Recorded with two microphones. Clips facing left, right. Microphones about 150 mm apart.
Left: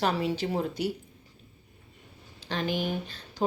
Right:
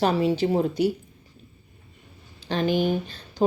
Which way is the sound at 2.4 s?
30° right (ahead or behind).